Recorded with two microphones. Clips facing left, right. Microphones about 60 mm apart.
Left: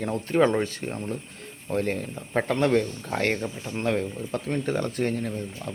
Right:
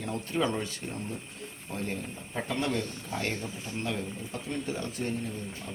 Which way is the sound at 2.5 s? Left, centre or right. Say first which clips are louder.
Left 8 dB; left.